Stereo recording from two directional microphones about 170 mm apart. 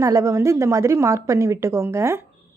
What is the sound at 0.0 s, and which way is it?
A woman's voice, 20° right (ahead or behind).